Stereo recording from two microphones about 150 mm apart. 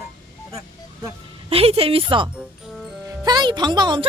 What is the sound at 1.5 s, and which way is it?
Speech, 40° right (ahead or behind).